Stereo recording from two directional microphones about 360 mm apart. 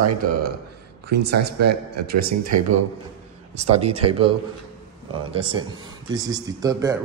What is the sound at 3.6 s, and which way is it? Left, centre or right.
Speech, centre.